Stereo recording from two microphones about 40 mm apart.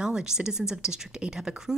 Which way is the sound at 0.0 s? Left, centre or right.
Centre.